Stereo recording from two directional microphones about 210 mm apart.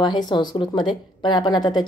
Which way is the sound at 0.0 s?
20° left (ahead or behind).